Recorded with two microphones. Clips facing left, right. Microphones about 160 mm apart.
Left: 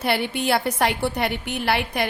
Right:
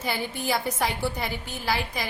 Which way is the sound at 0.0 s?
70° left (ahead or behind).